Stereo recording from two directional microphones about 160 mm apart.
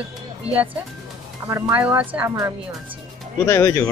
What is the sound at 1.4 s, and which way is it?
Speech, 20° right (ahead or behind).